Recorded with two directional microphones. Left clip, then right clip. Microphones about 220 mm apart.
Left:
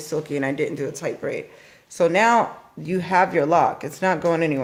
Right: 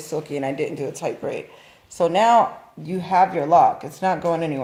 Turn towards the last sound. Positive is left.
turn(degrees=30)  # may be behind; listen again after turning